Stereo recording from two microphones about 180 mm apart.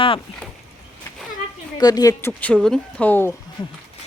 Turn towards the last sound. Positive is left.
turn(degrees=10)  # may be behind; listen again after turning